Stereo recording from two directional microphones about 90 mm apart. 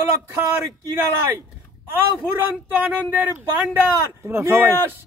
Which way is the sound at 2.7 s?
25° right (ahead or behind).